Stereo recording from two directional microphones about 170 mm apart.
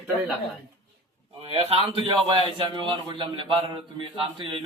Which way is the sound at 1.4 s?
35° right (ahead or behind).